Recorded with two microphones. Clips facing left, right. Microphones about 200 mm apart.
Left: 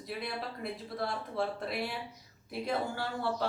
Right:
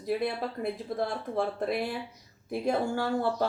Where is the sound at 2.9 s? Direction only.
50° right (ahead or behind).